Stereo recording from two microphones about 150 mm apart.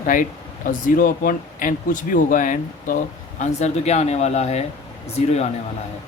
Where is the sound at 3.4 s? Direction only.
50° left (ahead or behind).